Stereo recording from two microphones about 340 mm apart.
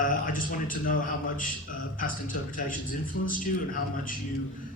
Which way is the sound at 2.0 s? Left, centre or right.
Left.